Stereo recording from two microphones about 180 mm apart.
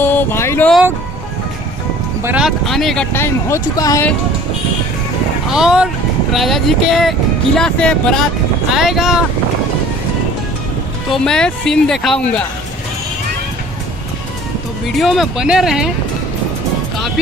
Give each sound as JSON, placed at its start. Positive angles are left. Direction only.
{"t": 0.0, "sound": "a sound", "side_deg": 10}
{"t": 2.2, "sound": "speech", "side_deg": -5}
{"t": 3.1, "sound": "speech", "side_deg": 15}
{"t": 5.5, "sound": "speech", "side_deg": -5}
{"t": 11.1, "sound": "speech", "side_deg": 5}
{"t": 14.9, "sound": "speech", "side_deg": 0}